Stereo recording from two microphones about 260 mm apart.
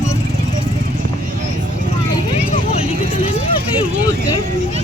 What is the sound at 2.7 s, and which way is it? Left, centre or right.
Vehicle, left.